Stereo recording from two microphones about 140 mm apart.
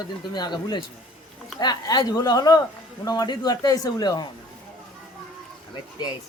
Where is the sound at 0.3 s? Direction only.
30° left (ahead or behind).